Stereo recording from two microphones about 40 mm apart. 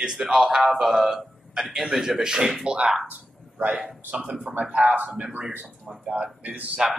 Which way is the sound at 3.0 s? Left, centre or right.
Right.